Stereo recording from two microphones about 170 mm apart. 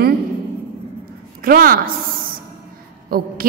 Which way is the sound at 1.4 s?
60° right (ahead or behind).